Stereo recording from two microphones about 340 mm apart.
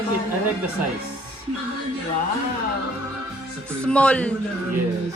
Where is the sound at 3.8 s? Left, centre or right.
Centre.